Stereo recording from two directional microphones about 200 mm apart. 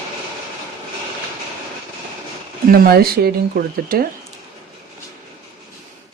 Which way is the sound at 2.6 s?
50° right (ahead or behind).